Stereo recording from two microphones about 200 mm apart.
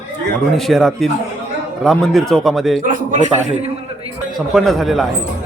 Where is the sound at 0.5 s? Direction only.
Centre (ahead or behind).